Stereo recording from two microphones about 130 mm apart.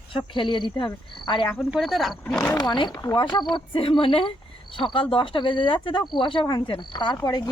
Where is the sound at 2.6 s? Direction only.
35° left (ahead or behind).